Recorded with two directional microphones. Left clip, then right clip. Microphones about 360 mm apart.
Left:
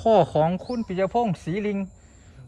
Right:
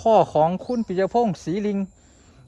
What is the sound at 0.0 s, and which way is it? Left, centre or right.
Speech, centre.